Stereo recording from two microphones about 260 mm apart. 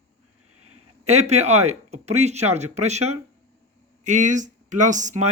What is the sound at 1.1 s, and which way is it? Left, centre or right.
Speech, right.